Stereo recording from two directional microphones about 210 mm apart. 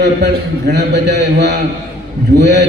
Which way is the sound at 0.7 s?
55° right (ahead or behind).